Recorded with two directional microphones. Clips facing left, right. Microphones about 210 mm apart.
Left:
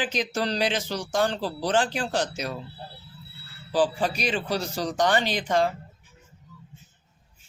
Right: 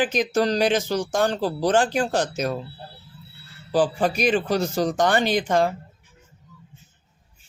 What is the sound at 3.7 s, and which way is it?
Speech, 45° right (ahead or behind).